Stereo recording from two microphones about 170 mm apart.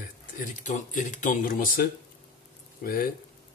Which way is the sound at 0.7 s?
45° left (ahead or behind).